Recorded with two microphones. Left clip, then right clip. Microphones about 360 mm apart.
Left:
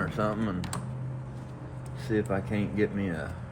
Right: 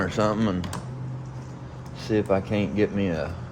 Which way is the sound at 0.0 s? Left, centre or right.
Right.